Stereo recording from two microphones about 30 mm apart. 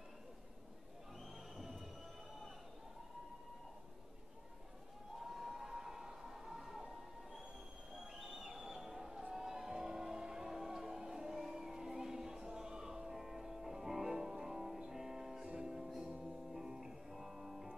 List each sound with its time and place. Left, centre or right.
1.6 s music: centre
5.2 s a sound: centre
13.2 s music: centre